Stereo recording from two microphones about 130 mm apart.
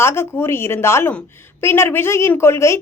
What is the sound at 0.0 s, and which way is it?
A woman's voice, 20° left (ahead or behind).